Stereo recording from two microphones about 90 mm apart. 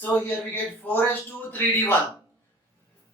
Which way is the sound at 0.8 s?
20° left (ahead or behind).